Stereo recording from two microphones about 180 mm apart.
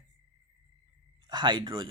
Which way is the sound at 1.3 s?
25° right (ahead or behind).